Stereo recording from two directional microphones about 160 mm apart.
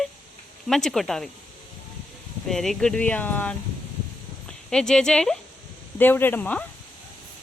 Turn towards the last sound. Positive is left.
turn(degrees=10)  # may be behind; listen again after turning